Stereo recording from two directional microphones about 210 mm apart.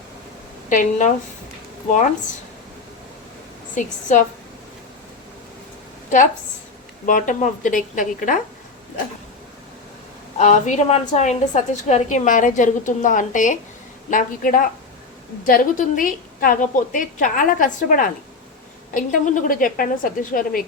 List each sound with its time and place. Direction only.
0.7 s a woman's voice: 35° left (ahead or behind)
3.8 s a woman's voice: 35° left (ahead or behind)
7.0 s a woman's voice: 40° left (ahead or behind)
10.3 s a woman's voice: 35° left (ahead or behind)